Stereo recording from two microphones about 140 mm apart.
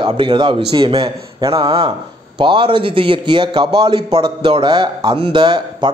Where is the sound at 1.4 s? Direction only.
25° right (ahead or behind).